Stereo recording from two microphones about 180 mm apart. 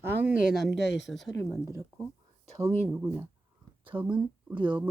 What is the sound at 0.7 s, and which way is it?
Speech, 75° left (ahead or behind).